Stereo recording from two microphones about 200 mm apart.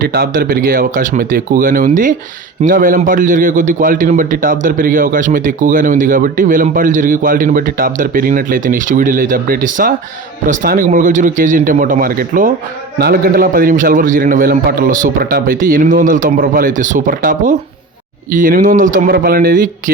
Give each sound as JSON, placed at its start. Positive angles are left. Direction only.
{"t": 0.0, "sound": "speech", "side_deg": -45}